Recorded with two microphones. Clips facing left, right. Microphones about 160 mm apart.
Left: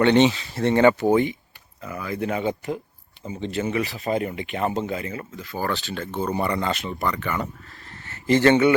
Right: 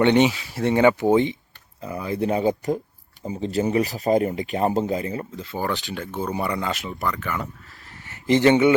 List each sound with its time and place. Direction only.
0.0 s speech: 15° right (ahead or behind)